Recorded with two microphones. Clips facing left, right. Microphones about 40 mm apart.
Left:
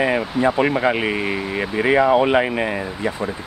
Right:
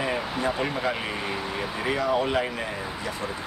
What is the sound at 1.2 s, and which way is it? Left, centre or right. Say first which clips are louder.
Speech: left 6 dB; centre.